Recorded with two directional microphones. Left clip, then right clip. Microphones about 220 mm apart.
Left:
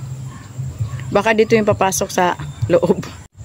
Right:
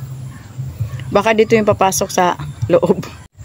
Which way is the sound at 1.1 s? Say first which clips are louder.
Right 2 dB; 5° right (ahead or behind).